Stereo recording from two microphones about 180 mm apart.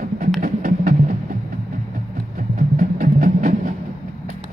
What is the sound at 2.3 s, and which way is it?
Music, 50° right (ahead or behind).